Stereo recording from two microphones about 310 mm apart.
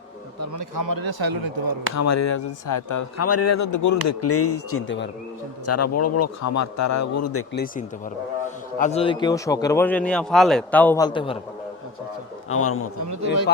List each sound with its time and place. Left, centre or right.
0.3 s a man's voice: right
2.0 s speech: left
3.2 s speech: left
4.0 s a man's voice: left
5.6 s a man's voice: left
7.5 s a man's voice: left
12.5 s a man's voice: left